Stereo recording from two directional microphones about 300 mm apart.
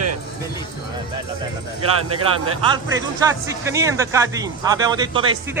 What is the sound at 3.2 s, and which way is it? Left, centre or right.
Speech, centre.